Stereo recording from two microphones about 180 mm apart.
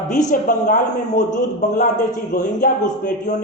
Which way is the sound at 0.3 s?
45° left (ahead or behind).